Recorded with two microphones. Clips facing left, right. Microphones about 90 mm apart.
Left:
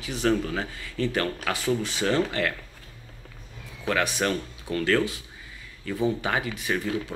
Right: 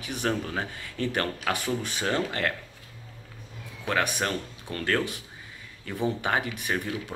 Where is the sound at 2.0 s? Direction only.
25° right (ahead or behind).